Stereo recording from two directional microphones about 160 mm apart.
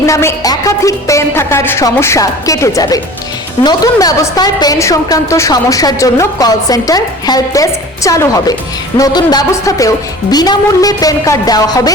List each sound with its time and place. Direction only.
0.0 s a woman's voice: 15° left (ahead or behind)